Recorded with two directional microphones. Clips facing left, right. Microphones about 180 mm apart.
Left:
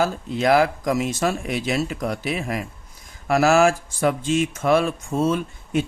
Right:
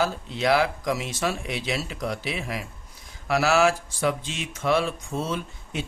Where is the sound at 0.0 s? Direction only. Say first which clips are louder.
Left 4 dB; 45° left (ahead or behind).